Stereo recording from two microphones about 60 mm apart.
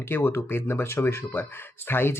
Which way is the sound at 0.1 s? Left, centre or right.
Left.